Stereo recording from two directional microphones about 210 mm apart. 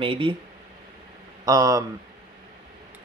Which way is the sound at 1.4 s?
15° right (ahead or behind).